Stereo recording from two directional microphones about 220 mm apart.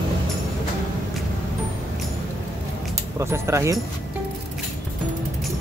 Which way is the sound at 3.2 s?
15° right (ahead or behind).